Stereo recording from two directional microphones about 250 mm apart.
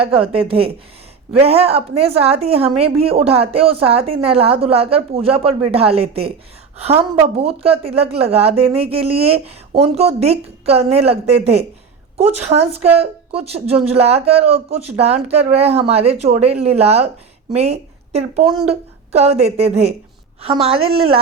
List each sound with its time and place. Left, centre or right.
0.0 s a woman's voice: right
20.7 s speech: right